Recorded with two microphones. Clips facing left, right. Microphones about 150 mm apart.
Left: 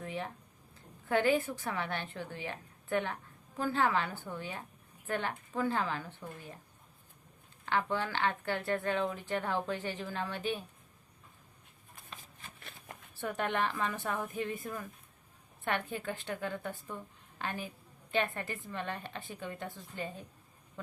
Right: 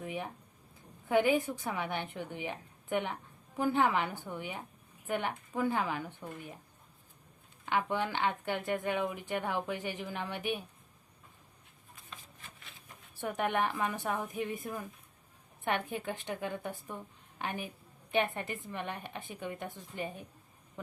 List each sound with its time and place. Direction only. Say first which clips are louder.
0.0 s a sound: even; 15° right (ahead or behind)
1.0 s speech: right 1 dB; 15° right (ahead or behind)
7.6 s speech: right 1 dB; 15° right (ahead or behind)
13.1 s speech: right 1 dB; 15° right (ahead or behind)